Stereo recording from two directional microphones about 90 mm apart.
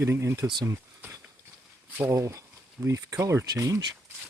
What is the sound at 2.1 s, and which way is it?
Speech, 35° right (ahead or behind).